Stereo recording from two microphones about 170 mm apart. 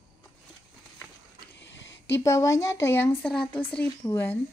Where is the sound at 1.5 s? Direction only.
90° left.